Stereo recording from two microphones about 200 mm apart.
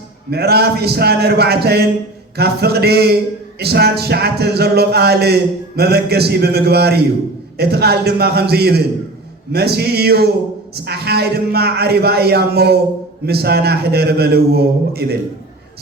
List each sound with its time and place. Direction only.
0.3 s music: 55° right (ahead or behind)